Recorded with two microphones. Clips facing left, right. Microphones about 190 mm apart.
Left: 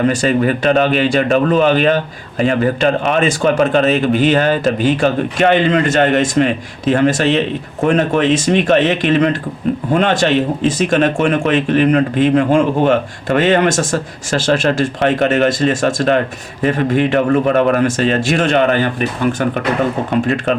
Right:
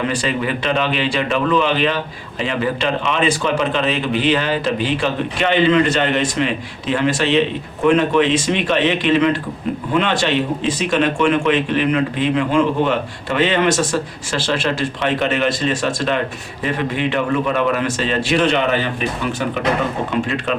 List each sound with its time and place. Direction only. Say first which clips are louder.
0.0 s a man's voice: left 7 dB; 45° left (ahead or behind)